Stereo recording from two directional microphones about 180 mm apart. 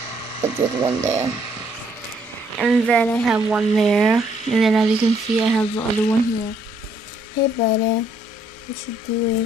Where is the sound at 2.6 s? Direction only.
Centre (ahead or behind).